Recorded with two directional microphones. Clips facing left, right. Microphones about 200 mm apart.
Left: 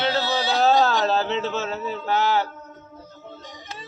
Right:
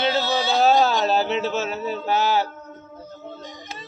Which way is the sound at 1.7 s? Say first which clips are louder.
Right 1 dB; 15° right (ahead or behind).